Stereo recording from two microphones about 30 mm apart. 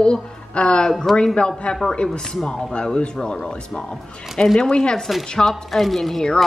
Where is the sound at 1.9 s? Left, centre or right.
Left.